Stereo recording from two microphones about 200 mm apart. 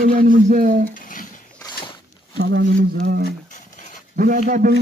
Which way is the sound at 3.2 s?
40° left (ahead or behind).